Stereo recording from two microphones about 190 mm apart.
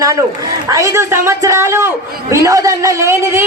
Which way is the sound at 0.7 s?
15° right (ahead or behind).